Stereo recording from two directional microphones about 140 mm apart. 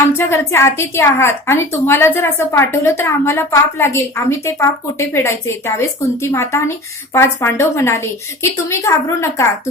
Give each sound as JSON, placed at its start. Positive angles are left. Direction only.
{"t": 0.2, "sound": "a woman's voice", "side_deg": 15}